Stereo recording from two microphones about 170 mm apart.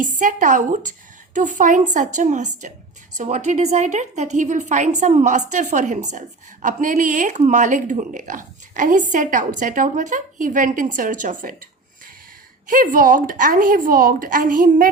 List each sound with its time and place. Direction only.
0.0 s a woman's voice: 50° right (ahead or behind)
12.6 s a woman's voice: 55° right (ahead or behind)